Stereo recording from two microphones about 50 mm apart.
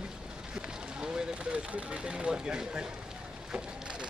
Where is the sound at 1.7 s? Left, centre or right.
Centre.